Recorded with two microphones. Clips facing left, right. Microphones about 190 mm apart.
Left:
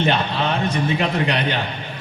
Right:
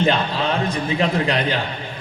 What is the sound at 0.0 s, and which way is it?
A man's voice, 35° right (ahead or behind).